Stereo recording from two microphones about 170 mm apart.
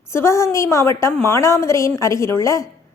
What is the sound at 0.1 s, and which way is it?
A woman's voice, 15° left (ahead or behind).